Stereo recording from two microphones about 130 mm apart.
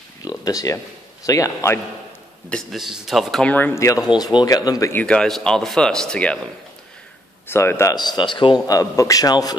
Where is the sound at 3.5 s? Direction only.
15° left (ahead or behind).